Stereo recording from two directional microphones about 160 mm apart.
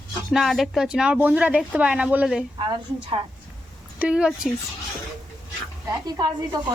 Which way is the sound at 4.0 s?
5° right (ahead or behind).